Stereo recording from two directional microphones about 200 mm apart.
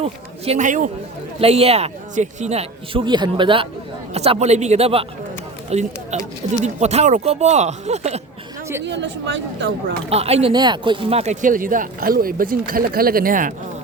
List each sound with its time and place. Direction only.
0.0 s speech: 30° right (ahead or behind)
8.9 s speech: 65° right (ahead or behind)
10.1 s speech: 30° right (ahead or behind)